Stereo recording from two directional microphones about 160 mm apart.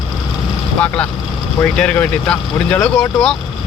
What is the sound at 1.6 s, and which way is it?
Speech, 10° left (ahead or behind).